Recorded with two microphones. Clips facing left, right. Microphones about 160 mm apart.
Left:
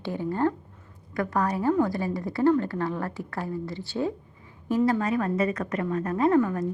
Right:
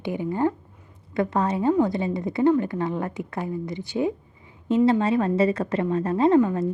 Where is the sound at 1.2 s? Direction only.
25° right (ahead or behind).